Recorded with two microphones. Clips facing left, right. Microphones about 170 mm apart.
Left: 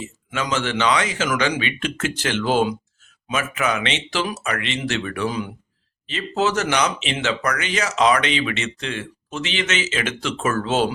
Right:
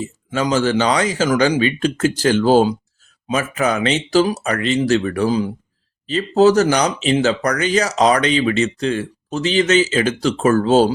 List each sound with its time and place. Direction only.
0.0 s speech: 35° right (ahead or behind)